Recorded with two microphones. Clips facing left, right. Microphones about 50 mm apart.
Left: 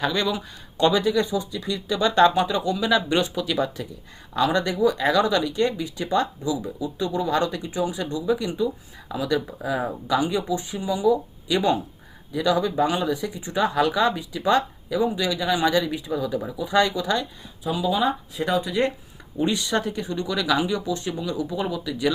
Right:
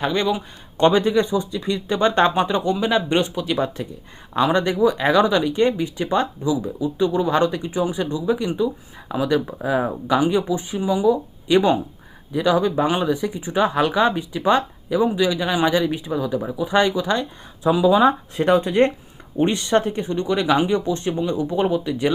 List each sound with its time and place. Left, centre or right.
0.0 s speech: right
0.8 s speech: right
4.8 s speech: right
5.5 s speech: right
17.6 s speech: right
17.9 s speech: right